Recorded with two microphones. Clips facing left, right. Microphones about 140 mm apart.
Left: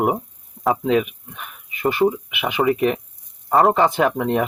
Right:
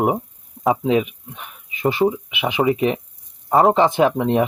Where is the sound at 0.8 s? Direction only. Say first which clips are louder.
Even; 20° right (ahead or behind).